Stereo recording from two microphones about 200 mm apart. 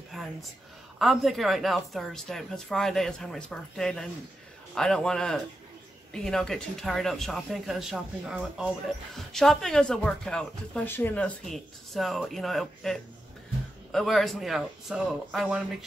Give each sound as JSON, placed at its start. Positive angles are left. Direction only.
{"t": 0.1, "sound": "whispering", "side_deg": 0}
{"t": 0.9, "sound": "speech", "side_deg": 0}